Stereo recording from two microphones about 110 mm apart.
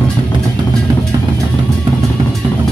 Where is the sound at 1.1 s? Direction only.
40° right (ahead or behind).